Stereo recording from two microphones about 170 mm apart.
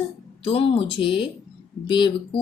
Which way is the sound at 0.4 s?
35° left (ahead or behind).